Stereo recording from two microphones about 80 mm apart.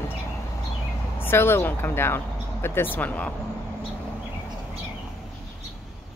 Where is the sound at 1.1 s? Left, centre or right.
Left.